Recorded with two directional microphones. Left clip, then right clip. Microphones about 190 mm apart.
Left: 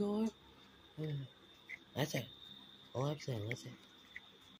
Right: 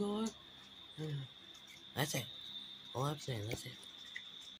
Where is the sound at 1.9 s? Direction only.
10° left (ahead or behind).